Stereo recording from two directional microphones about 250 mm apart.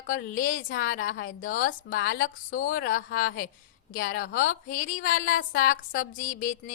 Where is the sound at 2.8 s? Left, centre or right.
Left.